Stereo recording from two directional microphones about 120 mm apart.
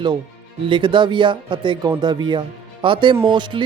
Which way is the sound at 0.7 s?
40° right (ahead or behind).